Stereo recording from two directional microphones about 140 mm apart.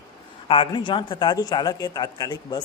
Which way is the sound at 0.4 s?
40° left (ahead or behind).